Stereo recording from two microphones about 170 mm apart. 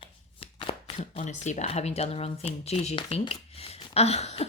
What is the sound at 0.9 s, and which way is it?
Speech, 45° left (ahead or behind).